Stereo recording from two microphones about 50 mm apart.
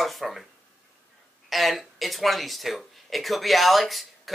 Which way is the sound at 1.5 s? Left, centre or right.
Centre.